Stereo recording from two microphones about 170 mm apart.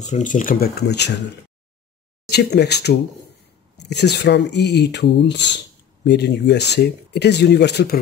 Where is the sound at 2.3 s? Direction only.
75° left (ahead or behind).